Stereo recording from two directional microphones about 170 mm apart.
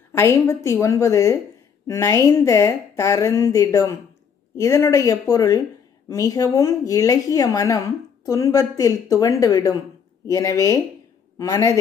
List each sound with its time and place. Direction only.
0.1 s a woman's voice: 15° left (ahead or behind)